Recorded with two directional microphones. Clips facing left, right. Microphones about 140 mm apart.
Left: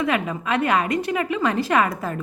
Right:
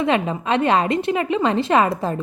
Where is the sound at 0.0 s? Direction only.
25° right (ahead or behind).